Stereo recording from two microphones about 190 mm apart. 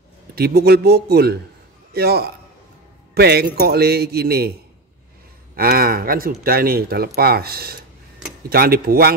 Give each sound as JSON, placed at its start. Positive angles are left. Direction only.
{"t": 0.4, "sound": "a man's voice", "side_deg": -55}
{"t": 5.6, "sound": "speech", "side_deg": -50}